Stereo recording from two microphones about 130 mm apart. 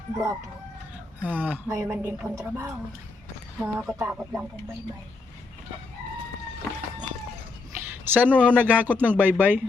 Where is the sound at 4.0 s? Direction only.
15° right (ahead or behind).